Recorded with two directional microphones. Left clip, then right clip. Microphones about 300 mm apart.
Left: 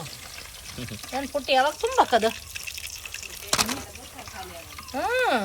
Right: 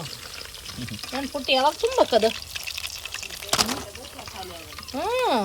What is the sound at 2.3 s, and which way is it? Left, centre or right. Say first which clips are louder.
Water: right 2 dB; centre.